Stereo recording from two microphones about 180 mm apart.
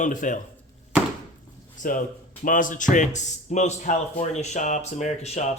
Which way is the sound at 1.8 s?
45° left (ahead or behind).